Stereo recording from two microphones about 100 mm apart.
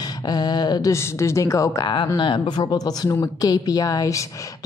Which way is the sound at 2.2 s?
50° left (ahead or behind).